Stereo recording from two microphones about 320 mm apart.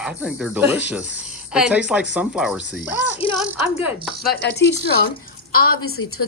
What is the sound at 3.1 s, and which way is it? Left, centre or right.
Music, centre.